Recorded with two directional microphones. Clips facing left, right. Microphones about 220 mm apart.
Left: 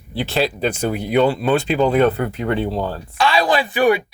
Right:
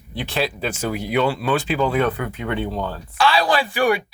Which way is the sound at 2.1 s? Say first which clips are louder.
Left 5 dB; 40° left (ahead or behind).